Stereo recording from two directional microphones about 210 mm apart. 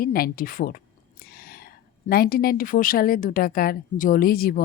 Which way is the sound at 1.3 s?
45° left (ahead or behind).